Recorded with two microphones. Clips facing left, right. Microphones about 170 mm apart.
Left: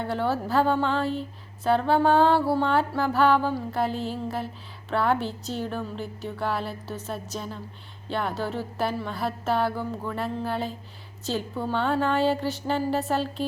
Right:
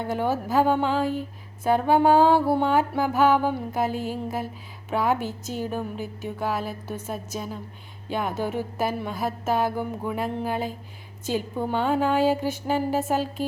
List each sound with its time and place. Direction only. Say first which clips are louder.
0.2 s music: right 2 dB; 15° right (ahead or behind)